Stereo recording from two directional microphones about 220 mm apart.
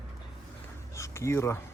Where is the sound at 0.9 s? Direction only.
15° left (ahead or behind).